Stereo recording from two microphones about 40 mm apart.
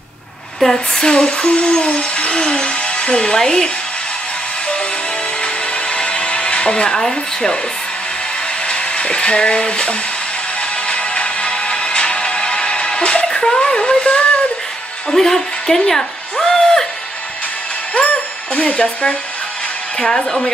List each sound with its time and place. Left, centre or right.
0.6 s speech: centre
1.0 s a sound: left
3.3 s speech: centre
5.4 s dental drill: left
8.6 s speech: left
10.9 s music: left
15.0 s speech: centre
17.9 s music: left
20.0 s speech: centre